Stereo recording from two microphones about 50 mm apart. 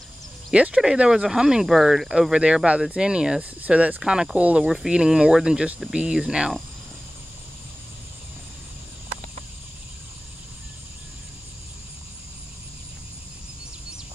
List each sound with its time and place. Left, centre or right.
0.5 s speech: right
1.0 s speech: centre
2.3 s speech: right
3.6 s speech: right
4.0 s speech: centre